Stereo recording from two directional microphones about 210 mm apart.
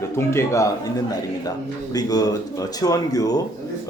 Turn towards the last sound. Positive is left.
turn(degrees=15)  # may be behind; listen again after turning